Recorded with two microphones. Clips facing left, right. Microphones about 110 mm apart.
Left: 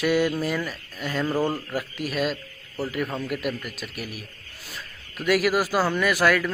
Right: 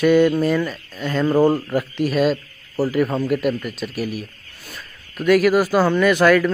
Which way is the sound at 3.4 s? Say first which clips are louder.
Right 8 dB; centre (ahead or behind).